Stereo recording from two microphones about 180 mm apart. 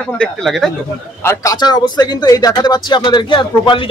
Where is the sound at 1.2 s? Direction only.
20° left (ahead or behind).